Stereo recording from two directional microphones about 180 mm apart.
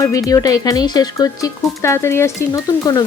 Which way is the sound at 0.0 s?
20° left (ahead or behind).